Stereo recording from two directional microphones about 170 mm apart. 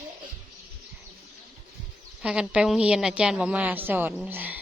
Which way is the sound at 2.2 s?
5° right (ahead or behind).